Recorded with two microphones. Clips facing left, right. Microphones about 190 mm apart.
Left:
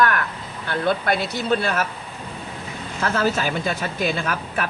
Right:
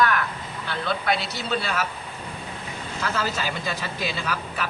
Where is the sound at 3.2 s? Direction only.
50° left (ahead or behind).